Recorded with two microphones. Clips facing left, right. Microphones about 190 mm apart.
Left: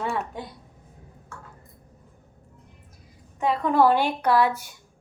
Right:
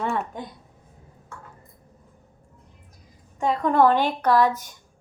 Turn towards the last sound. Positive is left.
turn(degrees=10)  # may be behind; listen again after turning